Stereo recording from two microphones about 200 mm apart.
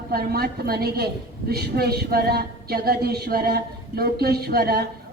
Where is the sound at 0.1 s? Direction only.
50° right (ahead or behind).